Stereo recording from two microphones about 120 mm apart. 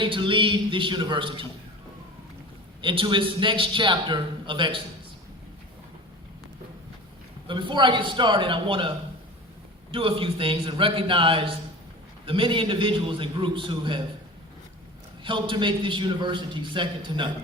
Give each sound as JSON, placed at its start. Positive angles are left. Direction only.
{"t": 0.0, "sound": "a man's voice", "side_deg": -45}
{"t": 2.8, "sound": "a man's voice", "side_deg": -45}
{"t": 7.4, "sound": "a man's voice", "side_deg": -40}
{"t": 9.9, "sound": "a man's voice", "side_deg": -50}
{"t": 15.2, "sound": "a man's voice", "side_deg": -45}